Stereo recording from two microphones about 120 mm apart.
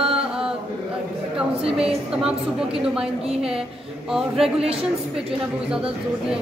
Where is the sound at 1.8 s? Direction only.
5° right (ahead or behind).